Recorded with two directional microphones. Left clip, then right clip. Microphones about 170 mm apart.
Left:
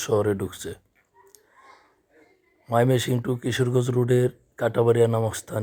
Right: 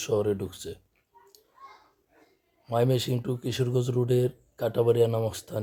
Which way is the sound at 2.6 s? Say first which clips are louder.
Left 4 dB; 15° left (ahead or behind).